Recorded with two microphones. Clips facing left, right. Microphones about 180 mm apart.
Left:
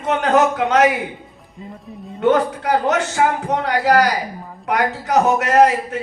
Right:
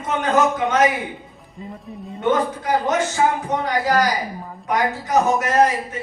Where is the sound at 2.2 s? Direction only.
65° left (ahead or behind).